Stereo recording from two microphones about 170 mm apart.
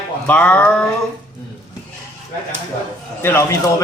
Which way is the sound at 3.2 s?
15° left (ahead or behind).